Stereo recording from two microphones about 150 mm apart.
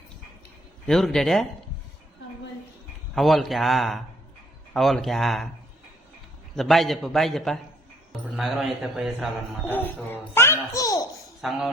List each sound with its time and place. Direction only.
0.9 s a man's voice: 5° left (ahead or behind)
3.2 s a man's voice: centre (ahead or behind)
6.6 s a man's voice: centre (ahead or behind)
9.6 s a child's voice: 15° left (ahead or behind)
11.3 s speech: centre (ahead or behind)